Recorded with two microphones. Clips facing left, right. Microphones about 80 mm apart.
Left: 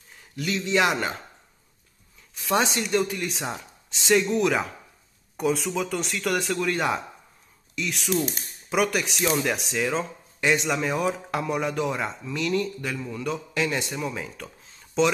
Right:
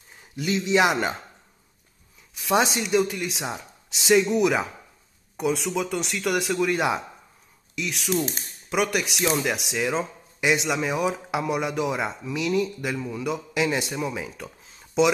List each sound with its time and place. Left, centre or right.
0.5 s speech: centre
2.3 s speech: centre